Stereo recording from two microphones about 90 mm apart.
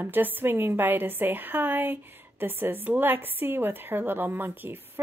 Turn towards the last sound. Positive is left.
turn(degrees=-25)  # may be behind; listen again after turning